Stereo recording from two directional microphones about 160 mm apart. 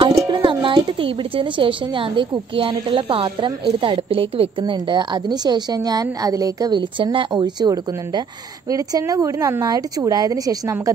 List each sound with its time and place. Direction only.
0.2 s a woman's voice: 30° right (ahead or behind)